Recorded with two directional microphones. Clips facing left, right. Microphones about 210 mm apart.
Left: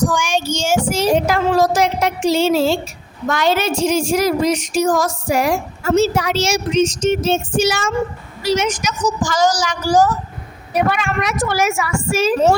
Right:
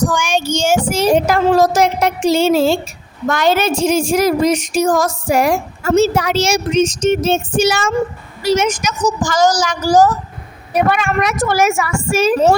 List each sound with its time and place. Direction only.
0.1 s child singing: 60° right (ahead or behind)
3.2 s a woman's voice: 50° right (ahead or behind)